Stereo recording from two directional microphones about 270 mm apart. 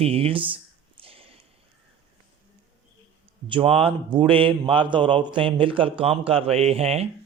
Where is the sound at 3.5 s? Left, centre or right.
Centre.